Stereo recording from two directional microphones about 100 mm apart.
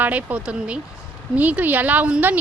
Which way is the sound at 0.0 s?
15° right (ahead or behind).